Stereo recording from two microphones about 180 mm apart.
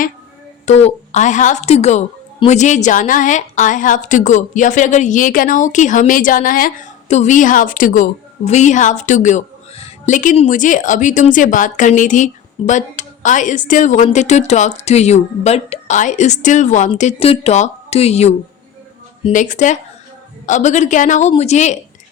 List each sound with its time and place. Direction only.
0.6 s a woman's voice: 35° left (ahead or behind)
19.3 s a woman's voice: 45° left (ahead or behind)